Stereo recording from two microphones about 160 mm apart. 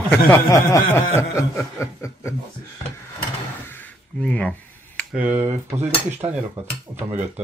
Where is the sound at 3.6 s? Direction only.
10° left (ahead or behind).